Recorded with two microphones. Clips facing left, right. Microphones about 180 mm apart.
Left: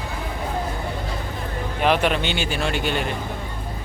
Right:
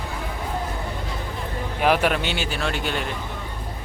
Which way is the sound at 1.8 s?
5° right (ahead or behind).